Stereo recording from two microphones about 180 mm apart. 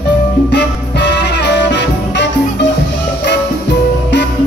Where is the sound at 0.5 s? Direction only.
70° left (ahead or behind).